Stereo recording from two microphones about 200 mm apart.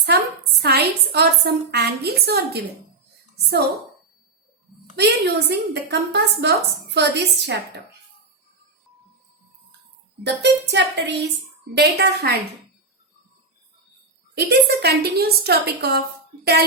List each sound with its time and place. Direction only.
0.6 s a woman's voice: 55° right (ahead or behind)
4.9 s a woman's voice: 55° right (ahead or behind)
10.2 s a woman's voice: 60° right (ahead or behind)
14.3 s a woman's voice: 55° right (ahead or behind)